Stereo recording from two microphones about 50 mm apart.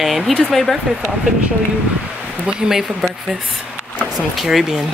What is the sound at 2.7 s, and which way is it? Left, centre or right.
Speech, centre.